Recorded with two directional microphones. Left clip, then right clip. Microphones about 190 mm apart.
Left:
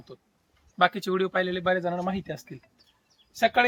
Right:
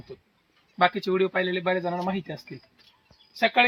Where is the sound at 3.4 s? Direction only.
10° right (ahead or behind).